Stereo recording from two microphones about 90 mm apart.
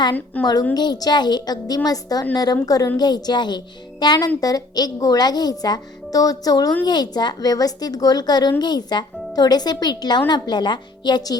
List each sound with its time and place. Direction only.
0.4 s a woman's voice: 20° left (ahead or behind)
0.7 s speech: 50° left (ahead or behind)